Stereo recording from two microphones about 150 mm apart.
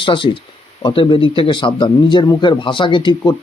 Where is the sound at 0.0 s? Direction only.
35° left (ahead or behind).